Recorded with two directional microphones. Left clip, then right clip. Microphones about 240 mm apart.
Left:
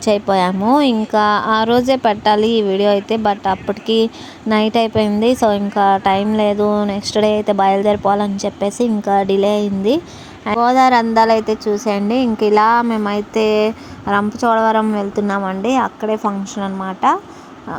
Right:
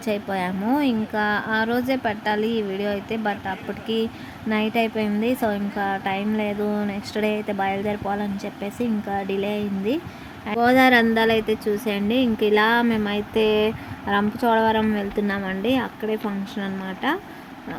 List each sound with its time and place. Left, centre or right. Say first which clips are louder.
0.0 s a woman's voice: left 11 dB; left